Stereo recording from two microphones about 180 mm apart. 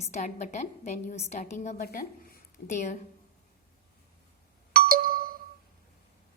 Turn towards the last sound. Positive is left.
turn(degrees=-55)  # may be behind; listen again after turning